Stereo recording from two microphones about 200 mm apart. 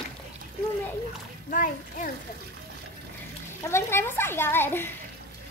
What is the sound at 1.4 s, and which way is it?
Speech, 40° left (ahead or behind).